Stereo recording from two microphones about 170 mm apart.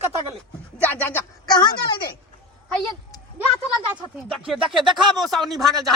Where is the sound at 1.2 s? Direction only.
25° left (ahead or behind).